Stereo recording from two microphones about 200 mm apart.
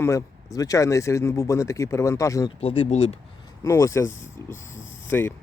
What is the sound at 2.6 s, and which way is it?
Speech, 30° left (ahead or behind).